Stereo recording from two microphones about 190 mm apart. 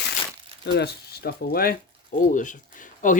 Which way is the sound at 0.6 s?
60° left (ahead or behind).